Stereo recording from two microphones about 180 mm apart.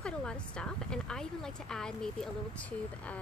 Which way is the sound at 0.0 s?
5° left (ahead or behind).